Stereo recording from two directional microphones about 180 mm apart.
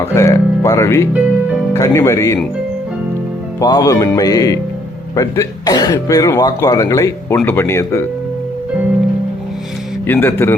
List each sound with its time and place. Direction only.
0.1 s speech: 15° left (ahead or behind)
3.6 s speech: 20° left (ahead or behind)
10.1 s speech: 10° left (ahead or behind)